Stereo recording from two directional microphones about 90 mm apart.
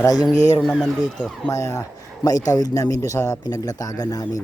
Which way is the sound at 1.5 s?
35° left (ahead or behind).